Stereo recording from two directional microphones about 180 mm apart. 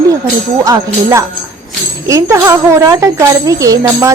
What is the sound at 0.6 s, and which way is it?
Speech, 20° right (ahead or behind).